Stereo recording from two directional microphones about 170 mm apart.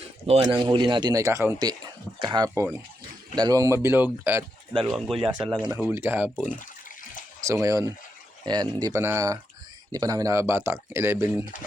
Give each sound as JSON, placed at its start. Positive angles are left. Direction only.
{"t": 0.5, "sound": "a man's voice", "side_deg": -25}
{"t": 4.8, "sound": "speech", "side_deg": 0}
{"t": 7.4, "sound": "a man's voice", "side_deg": -20}